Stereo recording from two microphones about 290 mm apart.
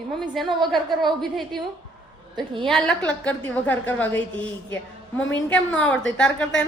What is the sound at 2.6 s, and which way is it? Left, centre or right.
A woman's voice, centre.